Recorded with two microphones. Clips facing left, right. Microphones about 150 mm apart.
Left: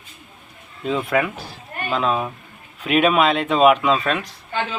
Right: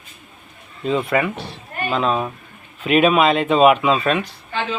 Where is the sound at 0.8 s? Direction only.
Centre (ahead or behind).